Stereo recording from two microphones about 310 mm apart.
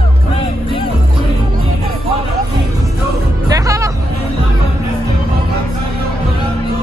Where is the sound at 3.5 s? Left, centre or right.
Centre.